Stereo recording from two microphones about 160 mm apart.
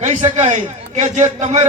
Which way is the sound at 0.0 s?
45° right (ahead or behind).